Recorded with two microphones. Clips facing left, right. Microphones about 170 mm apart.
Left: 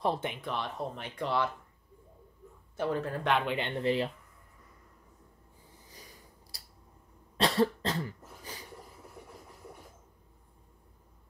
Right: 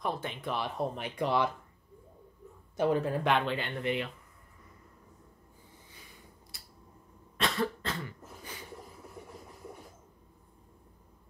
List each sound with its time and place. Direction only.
0.0 s speech: 30° left (ahead or behind)
0.4 s speech: 5° right (ahead or behind)
2.7 s speech: 15° right (ahead or behind)
3.4 s speech: 25° left (ahead or behind)
6.5 s tick-tock: 35° left (ahead or behind)
7.3 s cough: 35° left (ahead or behind)